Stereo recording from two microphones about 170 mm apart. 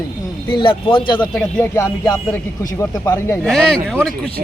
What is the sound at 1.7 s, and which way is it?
Music, 15° left (ahead or behind).